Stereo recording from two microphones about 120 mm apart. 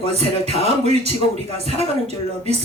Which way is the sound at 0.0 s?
60° right (ahead or behind).